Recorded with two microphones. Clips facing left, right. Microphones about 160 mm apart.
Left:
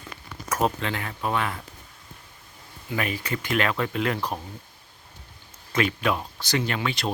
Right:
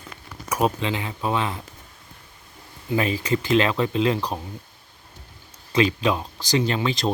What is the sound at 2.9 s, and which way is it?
Speech, 25° right (ahead or behind).